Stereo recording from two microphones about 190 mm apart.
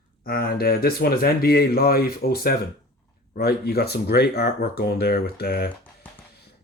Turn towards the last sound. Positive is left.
turn(degrees=55)  # may be behind; listen again after turning